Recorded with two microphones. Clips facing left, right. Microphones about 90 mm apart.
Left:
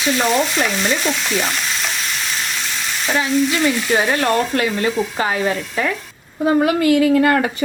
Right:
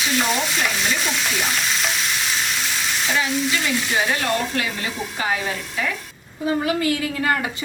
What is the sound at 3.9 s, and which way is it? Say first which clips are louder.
A woman's voice: left 4 dB; 45° left (ahead or behind).